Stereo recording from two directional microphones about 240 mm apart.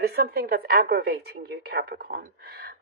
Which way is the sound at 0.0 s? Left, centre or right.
Right.